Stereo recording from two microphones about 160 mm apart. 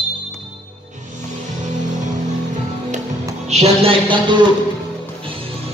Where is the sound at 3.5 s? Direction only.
40° right (ahead or behind).